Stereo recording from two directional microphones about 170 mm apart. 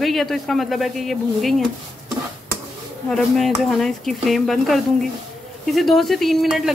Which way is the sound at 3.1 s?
Centre (ahead or behind).